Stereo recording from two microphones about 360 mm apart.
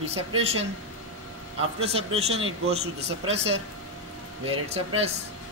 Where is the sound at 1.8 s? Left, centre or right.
Centre.